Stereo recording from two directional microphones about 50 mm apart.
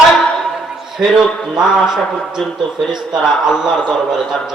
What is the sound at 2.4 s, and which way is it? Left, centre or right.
Speech, centre.